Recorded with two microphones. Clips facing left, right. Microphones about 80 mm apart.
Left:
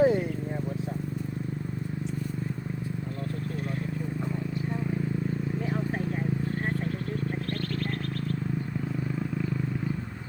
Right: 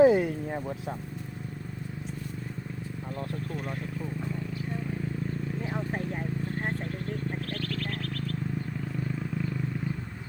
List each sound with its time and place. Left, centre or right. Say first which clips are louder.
0.0 s vehicle: right 3 dB; right
5.6 s a sound: left 2 dB; centre
9.1 s vehicle: left 2 dB; centre